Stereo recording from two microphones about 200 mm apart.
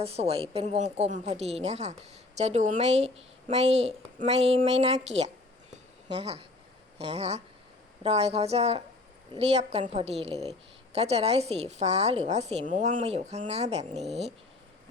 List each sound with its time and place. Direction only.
0.0 s a woman's voice: 30° right (ahead or behind)